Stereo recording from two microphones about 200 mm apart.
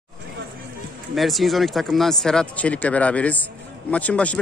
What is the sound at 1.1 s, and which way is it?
Speech, centre (ahead or behind).